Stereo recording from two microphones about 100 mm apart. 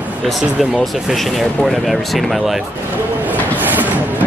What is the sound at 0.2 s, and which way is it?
Speech, centre (ahead or behind).